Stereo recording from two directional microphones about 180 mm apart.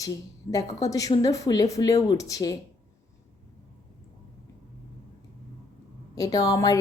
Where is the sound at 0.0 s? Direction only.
20° left (ahead or behind).